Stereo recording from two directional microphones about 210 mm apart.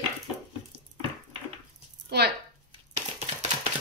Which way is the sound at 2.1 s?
50° right (ahead or behind).